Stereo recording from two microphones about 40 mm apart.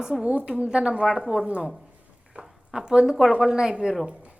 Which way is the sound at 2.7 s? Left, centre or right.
Centre.